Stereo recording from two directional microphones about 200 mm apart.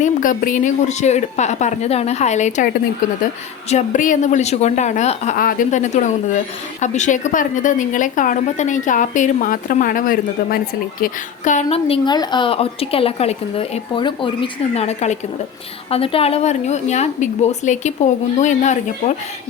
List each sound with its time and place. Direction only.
0.0 s a woman's voice: 40° left (ahead or behind)
3.7 s a woman's voice: 40° left (ahead or behind)